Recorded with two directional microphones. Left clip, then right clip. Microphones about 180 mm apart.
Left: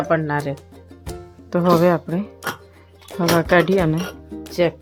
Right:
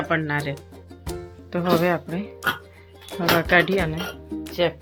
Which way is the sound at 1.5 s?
60° left (ahead or behind).